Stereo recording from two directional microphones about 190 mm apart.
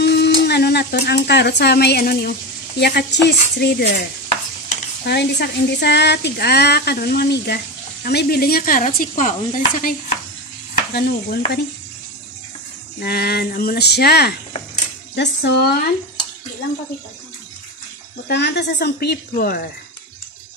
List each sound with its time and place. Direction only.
0.0 s speech: 60° left (ahead or behind)
5.0 s speech: 60° left (ahead or behind); by 9.3 s 40° left (ahead or behind)
9.8 s stir: 45° left (ahead or behind)
13.0 s speech: 55° left (ahead or behind)
18.3 s speech: 65° left (ahead or behind)